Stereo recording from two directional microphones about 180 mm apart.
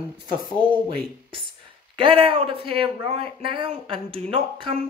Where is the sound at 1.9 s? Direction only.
30° right (ahead or behind).